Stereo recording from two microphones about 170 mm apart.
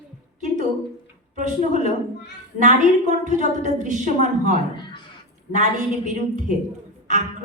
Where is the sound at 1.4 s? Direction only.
50° right (ahead or behind).